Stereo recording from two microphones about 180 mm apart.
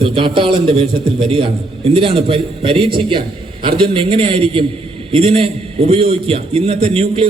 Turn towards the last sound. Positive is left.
turn(degrees=-35)  # may be behind; listen again after turning